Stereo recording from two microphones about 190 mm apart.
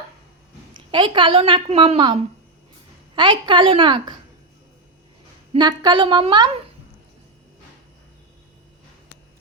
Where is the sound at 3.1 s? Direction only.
25° right (ahead or behind).